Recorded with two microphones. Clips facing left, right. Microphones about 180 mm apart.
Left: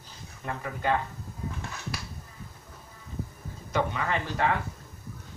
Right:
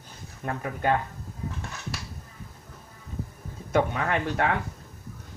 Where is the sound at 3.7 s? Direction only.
55° right (ahead or behind).